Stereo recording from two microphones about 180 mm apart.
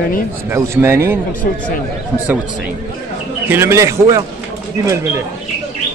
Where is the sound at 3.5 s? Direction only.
15° right (ahead or behind).